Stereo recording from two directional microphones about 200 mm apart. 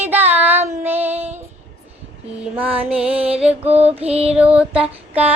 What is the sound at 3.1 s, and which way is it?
Music, 30° right (ahead or behind).